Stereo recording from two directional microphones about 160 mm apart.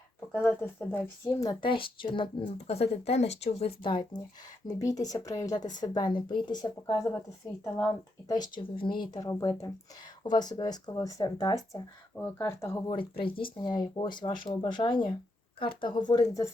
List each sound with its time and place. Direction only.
0.4 s speech: 15° left (ahead or behind)
1.4 s a woman's voice: 25° left (ahead or behind)
8.3 s speech: 25° left (ahead or behind)
12.9 s speech: 30° left (ahead or behind)